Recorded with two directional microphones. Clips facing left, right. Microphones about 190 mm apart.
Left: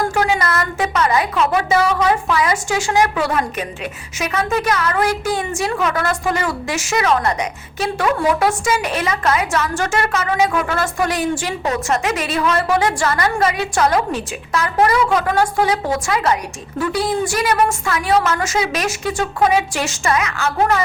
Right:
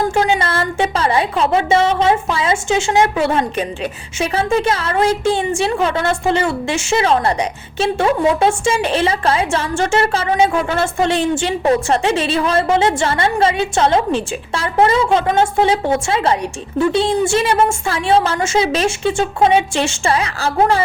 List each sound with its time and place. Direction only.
0.0 s a woman's voice: 25° right (ahead or behind)